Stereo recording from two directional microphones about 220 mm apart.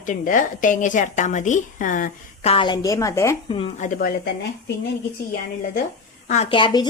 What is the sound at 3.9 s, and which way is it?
Speech, 45° left (ahead or behind).